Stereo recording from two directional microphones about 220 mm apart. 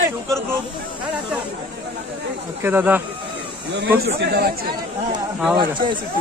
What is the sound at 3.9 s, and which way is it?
Speech, 45° right (ahead or behind).